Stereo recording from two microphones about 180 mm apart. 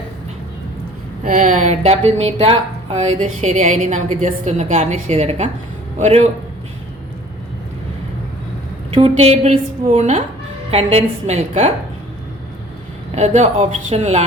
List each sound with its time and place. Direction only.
1.2 s a woman's voice: 45° right (ahead or behind)
8.9 s a woman's voice: 30° right (ahead or behind)
13.1 s a woman's voice: 40° right (ahead or behind)